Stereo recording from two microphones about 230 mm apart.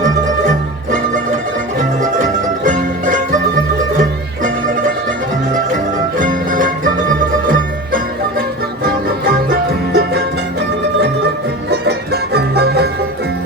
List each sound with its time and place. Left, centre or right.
0.0 s music: right
6.1 s music: right
11.7 s music: right